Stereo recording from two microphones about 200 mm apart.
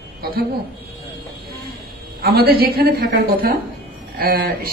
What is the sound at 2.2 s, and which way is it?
A woman's voice, 50° right (ahead or behind).